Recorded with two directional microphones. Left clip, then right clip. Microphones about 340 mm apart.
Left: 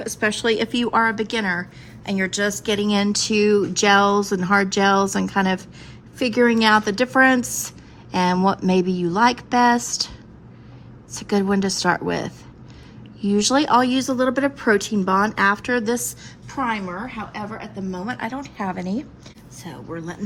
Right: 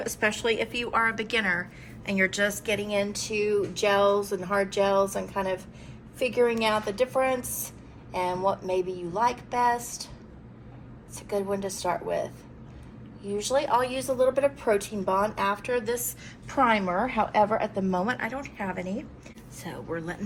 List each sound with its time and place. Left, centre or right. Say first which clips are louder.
0.0 s a woman's voice: left 5 dB; centre
11.1 s speech: left 7 dB; left
16.2 s a woman's voice: right 1 dB; centre